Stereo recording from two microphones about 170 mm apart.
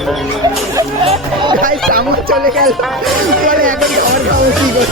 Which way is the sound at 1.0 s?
35° right (ahead or behind).